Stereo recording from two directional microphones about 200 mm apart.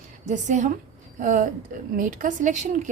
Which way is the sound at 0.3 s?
35° right (ahead or behind).